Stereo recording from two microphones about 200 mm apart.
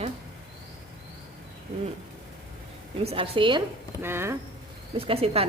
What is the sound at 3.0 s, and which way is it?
Speech, 30° right (ahead or behind).